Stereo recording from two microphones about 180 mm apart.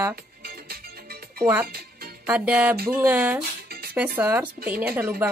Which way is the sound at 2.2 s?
10° right (ahead or behind).